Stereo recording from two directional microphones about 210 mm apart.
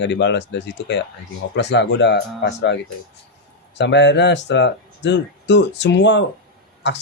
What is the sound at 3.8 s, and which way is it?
Speech, 55° left (ahead or behind).